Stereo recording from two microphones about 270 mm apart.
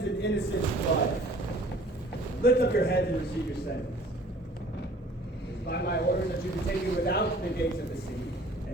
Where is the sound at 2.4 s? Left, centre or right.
Left.